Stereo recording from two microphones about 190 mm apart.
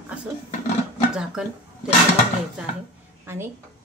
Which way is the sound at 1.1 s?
5° right (ahead or behind).